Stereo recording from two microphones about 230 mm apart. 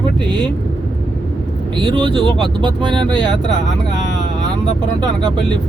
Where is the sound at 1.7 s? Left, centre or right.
Right.